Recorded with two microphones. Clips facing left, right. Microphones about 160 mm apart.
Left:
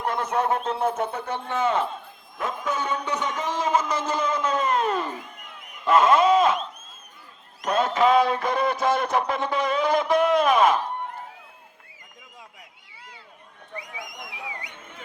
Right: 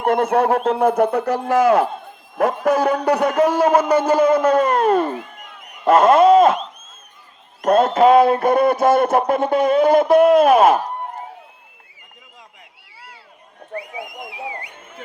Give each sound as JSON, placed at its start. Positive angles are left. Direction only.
{"t": 0.0, "sound": "speech", "side_deg": -55}
{"t": 7.6, "sound": "speech", "side_deg": -55}
{"t": 13.8, "sound": "whistling", "side_deg": -30}
{"t": 14.2, "sound": "a sound", "side_deg": -40}